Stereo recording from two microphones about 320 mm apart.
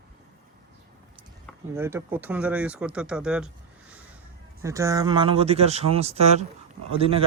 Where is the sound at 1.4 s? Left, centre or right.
Centre.